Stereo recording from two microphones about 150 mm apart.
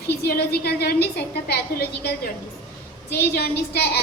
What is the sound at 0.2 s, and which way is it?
A woman's voice, 90° left.